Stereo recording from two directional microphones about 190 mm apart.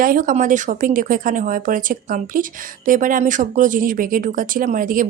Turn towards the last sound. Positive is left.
turn(degrees=-45)  # may be behind; listen again after turning